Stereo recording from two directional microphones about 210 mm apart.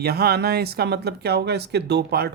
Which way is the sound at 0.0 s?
50° right (ahead or behind).